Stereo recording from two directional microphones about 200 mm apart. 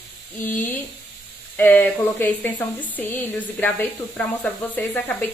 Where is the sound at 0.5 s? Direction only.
10° left (ahead or behind).